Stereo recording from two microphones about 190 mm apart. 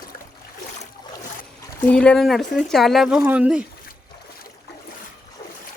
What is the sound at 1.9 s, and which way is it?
Speech, 5° left (ahead or behind).